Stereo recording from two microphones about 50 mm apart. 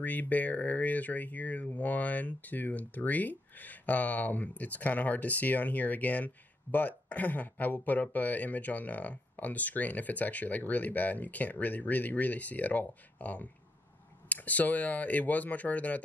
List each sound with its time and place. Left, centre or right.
0.0 s speech: left